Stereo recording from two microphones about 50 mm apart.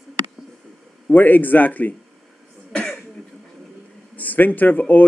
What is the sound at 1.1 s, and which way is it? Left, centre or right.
Speech, left.